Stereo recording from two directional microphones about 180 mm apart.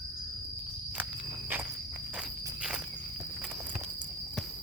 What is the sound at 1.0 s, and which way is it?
Walk, 10° right (ahead or behind).